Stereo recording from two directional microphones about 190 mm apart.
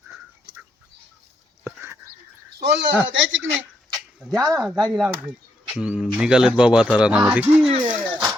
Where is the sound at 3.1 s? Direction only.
80° right.